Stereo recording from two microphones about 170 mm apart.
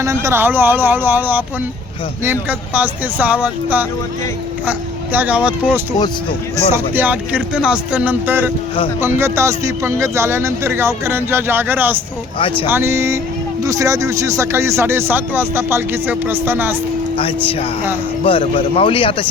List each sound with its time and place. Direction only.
0.0 s speech: 20° right (ahead or behind)
6.9 s speech: 10° right (ahead or behind)
12.4 s speech: 30° left (ahead or behind)
12.6 s speech: 15° right (ahead or behind)
17.2 s speech: 30° left (ahead or behind)